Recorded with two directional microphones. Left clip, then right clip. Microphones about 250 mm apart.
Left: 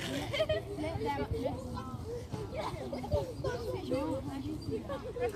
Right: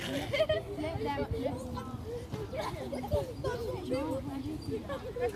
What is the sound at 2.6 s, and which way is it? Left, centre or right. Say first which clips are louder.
Speech: right 1 dB; right.